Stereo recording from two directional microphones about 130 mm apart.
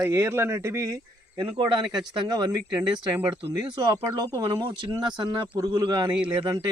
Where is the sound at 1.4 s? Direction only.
35° right (ahead or behind).